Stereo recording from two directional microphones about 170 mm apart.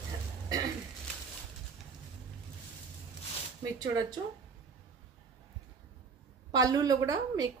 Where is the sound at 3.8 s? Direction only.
25° right (ahead or behind).